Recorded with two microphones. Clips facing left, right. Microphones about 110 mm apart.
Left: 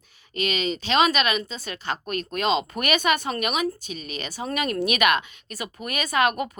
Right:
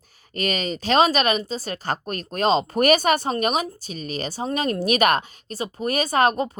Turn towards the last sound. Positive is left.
turn(degrees=-30)  # may be behind; listen again after turning